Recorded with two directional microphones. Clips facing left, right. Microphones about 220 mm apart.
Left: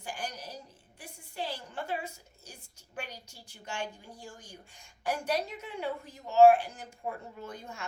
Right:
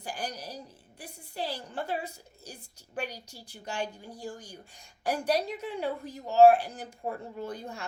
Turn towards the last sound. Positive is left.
turn(degrees=-35)  # may be behind; listen again after turning